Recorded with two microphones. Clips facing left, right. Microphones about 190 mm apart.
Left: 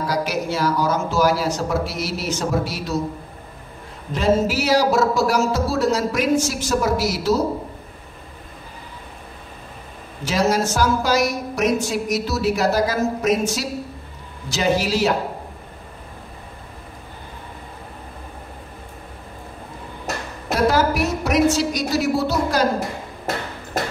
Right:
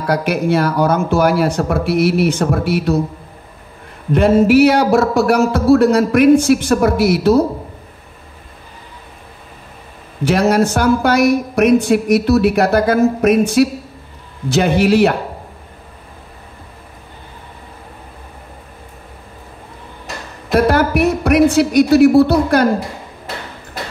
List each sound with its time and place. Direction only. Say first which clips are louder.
0.0 s a woman's voice: right 6 dB; 60° right (ahead or behind)
4.1 s a woman's voice: right 8 dB; 60° right (ahead or behind)
10.2 s a woman's voice: right 6 dB; 60° right (ahead or behind)
20.5 s a woman's voice: right 5 dB; 60° right (ahead or behind)